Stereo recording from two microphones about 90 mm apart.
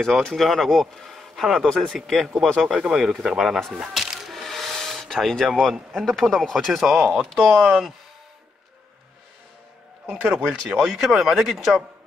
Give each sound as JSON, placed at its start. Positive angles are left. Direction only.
{"t": 0.0, "sound": "speech", "side_deg": 5}
{"t": 10.0, "sound": "speech", "side_deg": -15}
{"t": 10.5, "sound": "speech", "side_deg": -5}